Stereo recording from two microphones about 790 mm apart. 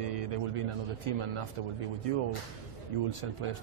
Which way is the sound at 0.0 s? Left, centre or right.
Right.